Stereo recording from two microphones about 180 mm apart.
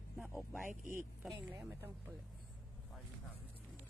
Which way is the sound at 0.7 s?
45° right (ahead or behind).